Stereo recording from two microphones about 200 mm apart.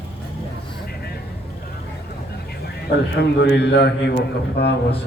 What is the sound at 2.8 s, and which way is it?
A man's voice, 55° left (ahead or behind).